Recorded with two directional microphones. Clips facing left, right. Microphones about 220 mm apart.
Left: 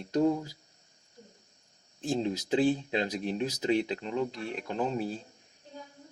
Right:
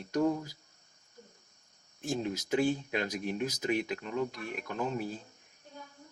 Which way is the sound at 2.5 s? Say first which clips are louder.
Left 3 dB; 30° left (ahead or behind).